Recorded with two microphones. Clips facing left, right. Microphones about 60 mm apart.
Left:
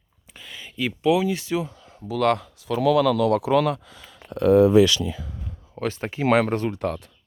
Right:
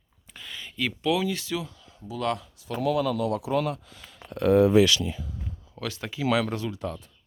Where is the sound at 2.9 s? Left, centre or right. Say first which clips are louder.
Left 7 dB; left.